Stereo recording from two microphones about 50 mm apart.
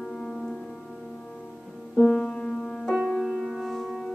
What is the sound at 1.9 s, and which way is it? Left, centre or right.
Music, centre.